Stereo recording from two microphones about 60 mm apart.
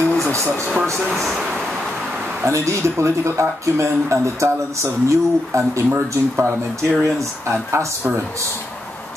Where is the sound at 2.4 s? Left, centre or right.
Right.